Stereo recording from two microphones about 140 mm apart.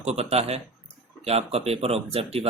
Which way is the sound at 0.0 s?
50° right (ahead or behind).